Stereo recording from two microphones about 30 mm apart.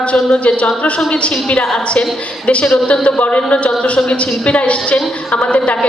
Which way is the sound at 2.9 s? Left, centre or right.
Left.